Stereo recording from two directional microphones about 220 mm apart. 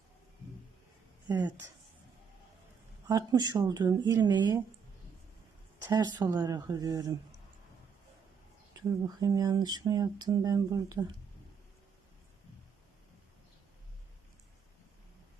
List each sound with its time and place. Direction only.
1.3 s speech: 20° right (ahead or behind)
3.1 s speech: 15° right (ahead or behind)
6.1 s speech: 15° right (ahead or behind)
8.9 s speech: 15° right (ahead or behind)